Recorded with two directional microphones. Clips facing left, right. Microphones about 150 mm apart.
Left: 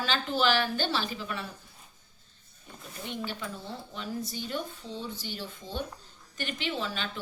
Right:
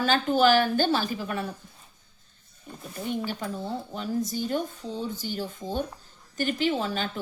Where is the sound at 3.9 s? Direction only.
45° right (ahead or behind).